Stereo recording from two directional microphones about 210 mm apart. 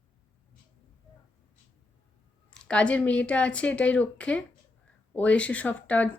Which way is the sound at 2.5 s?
5° left (ahead or behind).